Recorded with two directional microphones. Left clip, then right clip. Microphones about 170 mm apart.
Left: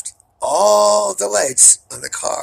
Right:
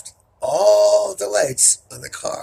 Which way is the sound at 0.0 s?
20° left (ahead or behind).